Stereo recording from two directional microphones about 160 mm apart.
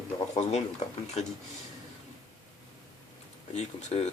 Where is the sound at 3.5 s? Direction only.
45° left (ahead or behind).